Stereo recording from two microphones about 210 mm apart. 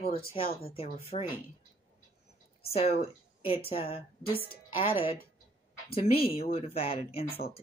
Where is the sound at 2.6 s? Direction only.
30° left (ahead or behind).